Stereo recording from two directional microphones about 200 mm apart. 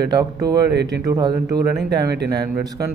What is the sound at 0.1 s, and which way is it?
Speech, 20° right (ahead or behind).